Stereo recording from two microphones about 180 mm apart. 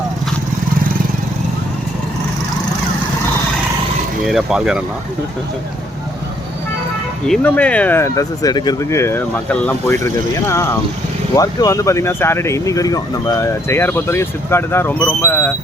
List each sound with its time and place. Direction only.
4.3 s speech: centre (ahead or behind)
7.3 s speech: 10° left (ahead or behind)
11.3 s speech: 20° left (ahead or behind)